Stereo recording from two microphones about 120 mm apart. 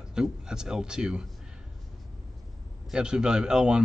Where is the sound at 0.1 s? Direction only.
5° right (ahead or behind).